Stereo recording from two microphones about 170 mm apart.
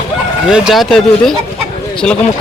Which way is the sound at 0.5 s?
Centre (ahead or behind).